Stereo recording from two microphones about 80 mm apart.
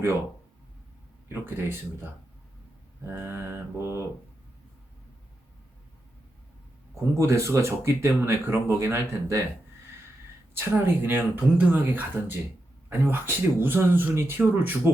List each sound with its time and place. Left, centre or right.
1.3 s speech: right
3.1 s speech: right
7.2 s speech: right
10.6 s speech: right